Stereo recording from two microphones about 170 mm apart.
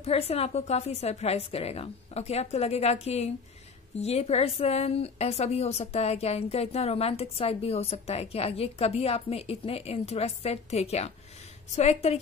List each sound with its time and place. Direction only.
0.0 s a woman's voice: 35° left (ahead or behind)